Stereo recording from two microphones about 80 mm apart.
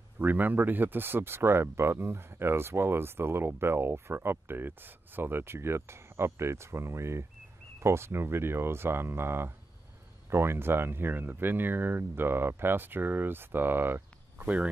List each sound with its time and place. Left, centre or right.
0.2 s speech: right